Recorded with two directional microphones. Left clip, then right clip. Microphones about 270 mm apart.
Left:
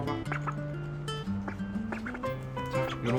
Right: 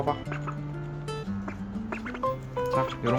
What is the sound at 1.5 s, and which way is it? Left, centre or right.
Music, centre.